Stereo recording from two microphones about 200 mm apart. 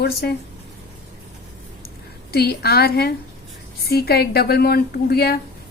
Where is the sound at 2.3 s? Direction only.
50° left (ahead or behind).